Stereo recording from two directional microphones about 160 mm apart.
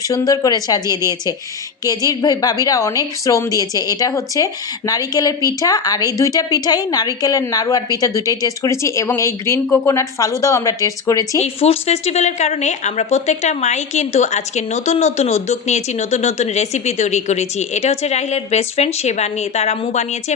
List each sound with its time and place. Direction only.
0.1 s a woman's voice: 25° left (ahead or behind)
11.3 s a woman's voice: 40° left (ahead or behind)